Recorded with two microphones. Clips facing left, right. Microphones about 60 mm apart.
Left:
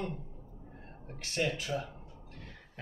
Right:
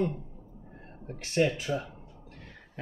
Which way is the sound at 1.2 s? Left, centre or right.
Right.